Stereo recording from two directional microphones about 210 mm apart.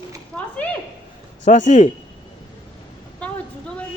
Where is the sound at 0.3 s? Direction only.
5° left (ahead or behind).